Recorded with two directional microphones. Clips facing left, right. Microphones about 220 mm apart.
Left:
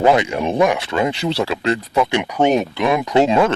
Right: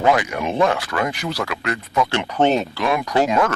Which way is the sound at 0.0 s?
25° left (ahead or behind).